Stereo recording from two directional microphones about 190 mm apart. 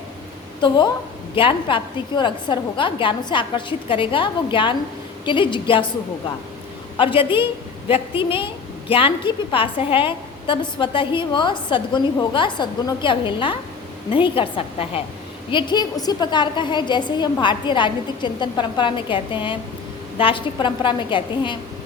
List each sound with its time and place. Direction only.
1.4 s a woman's voice: 25° left (ahead or behind)
6.9 s a woman's voice: 30° left (ahead or behind)